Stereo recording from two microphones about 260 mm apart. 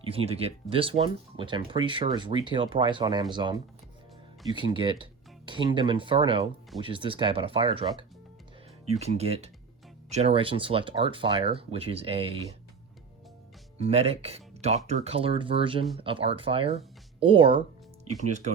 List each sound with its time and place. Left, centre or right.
0.0 s speech: right
8.9 s speech: right
13.7 s speech: right